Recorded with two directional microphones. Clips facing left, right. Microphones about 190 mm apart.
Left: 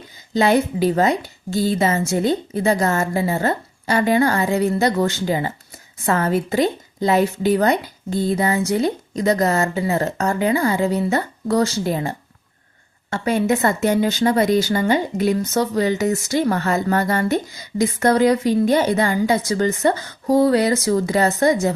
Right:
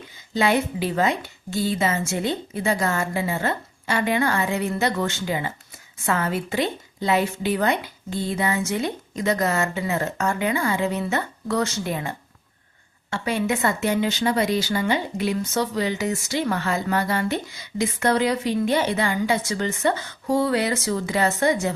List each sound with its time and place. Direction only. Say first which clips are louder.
0.3 s a woman's voice: left 5 dB; 40° left (ahead or behind)